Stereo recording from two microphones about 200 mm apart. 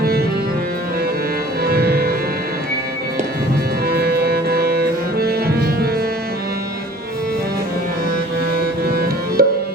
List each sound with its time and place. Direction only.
1.6 s music: 50° right (ahead or behind)
3.8 s music: 50° right (ahead or behind)
8.9 s music: 50° right (ahead or behind)